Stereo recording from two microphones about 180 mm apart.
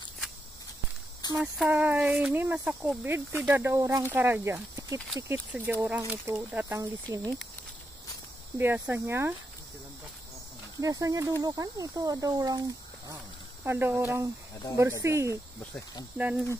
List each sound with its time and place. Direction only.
1.4 s speech: 5° right (ahead or behind)
8.5 s speech: 10° right (ahead or behind)
10.8 s speech: 20° right (ahead or behind)